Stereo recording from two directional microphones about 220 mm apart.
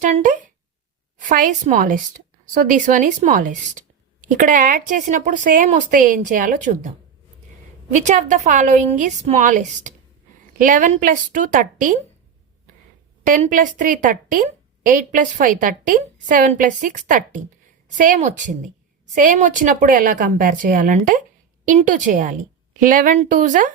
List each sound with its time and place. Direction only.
0.0 s a woman's voice: 35° right (ahead or behind)
13.2 s a woman's voice: 35° right (ahead or behind)